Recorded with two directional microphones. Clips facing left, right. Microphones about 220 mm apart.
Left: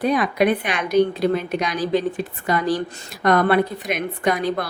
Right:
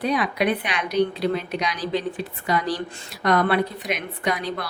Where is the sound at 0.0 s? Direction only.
50° left (ahead or behind).